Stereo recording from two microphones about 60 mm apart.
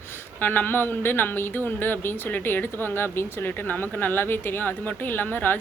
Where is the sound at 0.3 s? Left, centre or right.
Left.